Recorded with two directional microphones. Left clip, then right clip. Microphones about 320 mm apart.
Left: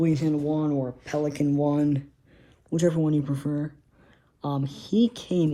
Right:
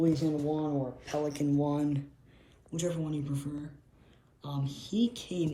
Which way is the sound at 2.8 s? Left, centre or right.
Left.